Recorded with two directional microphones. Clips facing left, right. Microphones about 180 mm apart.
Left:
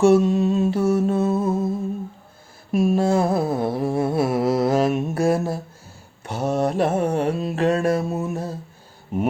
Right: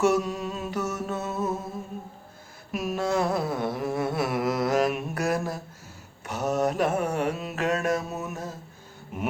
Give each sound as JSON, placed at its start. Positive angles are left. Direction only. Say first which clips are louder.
{"t": 0.0, "sound": "music", "louder": "left 8 dB", "side_deg": 25}
{"t": 2.7, "sound": "humming", "louder": "left 8 dB", "side_deg": 30}
{"t": 6.2, "sound": "mantra", "louder": "left 3 dB", "side_deg": 30}